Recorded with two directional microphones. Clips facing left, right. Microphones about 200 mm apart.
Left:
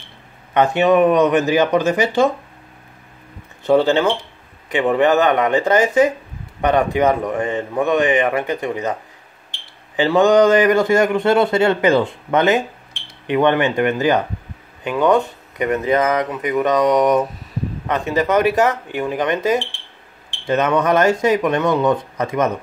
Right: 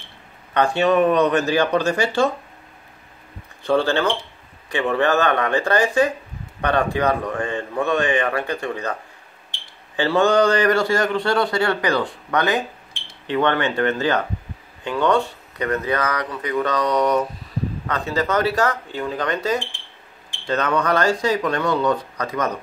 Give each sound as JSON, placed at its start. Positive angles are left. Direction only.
{"t": 0.6, "sound": "speech", "side_deg": 20}
{"t": 3.6, "sound": "a man's voice", "side_deg": 20}
{"t": 9.9, "sound": "a man's voice", "side_deg": 15}
{"t": 15.5, "sound": "a man's voice", "side_deg": 20}